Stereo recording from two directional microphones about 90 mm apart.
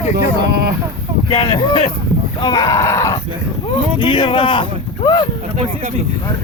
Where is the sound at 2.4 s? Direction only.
50° left (ahead or behind).